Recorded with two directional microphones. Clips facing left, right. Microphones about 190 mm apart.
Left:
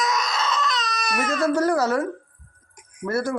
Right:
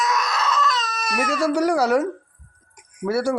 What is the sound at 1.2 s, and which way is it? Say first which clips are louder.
Speech: right 1 dB; 10° right (ahead or behind).